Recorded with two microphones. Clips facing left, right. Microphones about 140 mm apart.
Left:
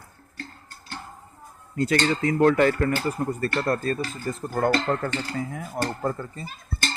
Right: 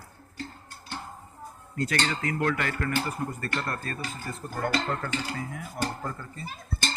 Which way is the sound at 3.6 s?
35° left (ahead or behind).